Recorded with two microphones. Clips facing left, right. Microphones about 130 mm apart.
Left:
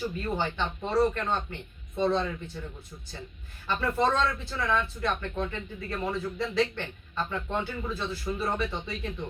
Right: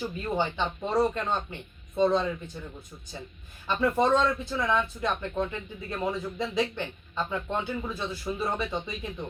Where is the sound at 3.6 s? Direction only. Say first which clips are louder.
Right 2 dB; 15° right (ahead or behind).